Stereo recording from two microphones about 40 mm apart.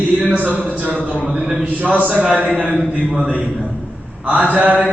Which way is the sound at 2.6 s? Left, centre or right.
Right.